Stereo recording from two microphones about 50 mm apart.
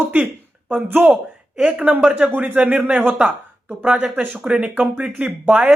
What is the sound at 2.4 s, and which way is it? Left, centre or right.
Speech, right.